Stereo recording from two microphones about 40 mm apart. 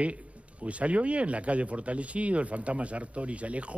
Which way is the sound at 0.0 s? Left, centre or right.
Right.